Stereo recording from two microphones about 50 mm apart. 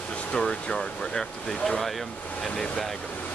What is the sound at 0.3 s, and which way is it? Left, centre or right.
Speech, centre.